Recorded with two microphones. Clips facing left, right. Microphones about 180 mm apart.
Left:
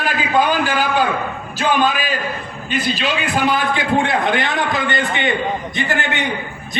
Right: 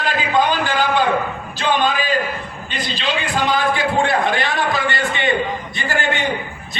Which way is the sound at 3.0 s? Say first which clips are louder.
Left 2 dB; 15° left (ahead or behind).